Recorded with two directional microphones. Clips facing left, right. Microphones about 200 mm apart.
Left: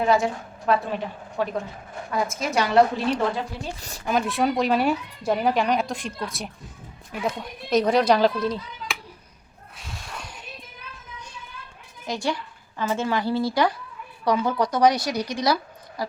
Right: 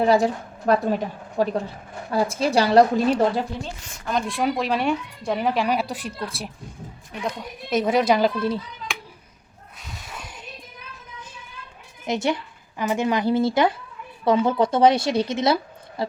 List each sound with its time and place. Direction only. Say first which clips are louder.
0.0 s a woman's voice: right 3 dB; 35° right (ahead or behind)
3.8 s speech: left 3 dB; 35° left (ahead or behind)
4.0 s speech: left 1 dB; 5° left (ahead or behind)
7.1 s speech: left 2 dB; 5° left (ahead or behind)
12.0 s a woman's voice: right 4 dB; 20° right (ahead or behind)